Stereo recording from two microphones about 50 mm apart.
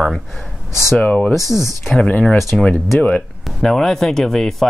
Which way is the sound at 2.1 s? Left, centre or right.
Left.